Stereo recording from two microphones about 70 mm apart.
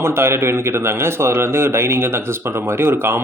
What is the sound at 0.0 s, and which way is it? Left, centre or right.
Speech, right.